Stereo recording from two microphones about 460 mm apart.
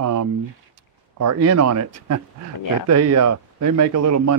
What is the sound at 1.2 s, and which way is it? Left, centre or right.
A man's voice, right.